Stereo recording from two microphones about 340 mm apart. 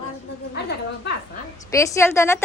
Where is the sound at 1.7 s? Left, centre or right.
Centre.